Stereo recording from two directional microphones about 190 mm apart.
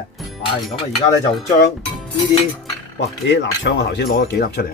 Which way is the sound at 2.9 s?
70° left (ahead or behind).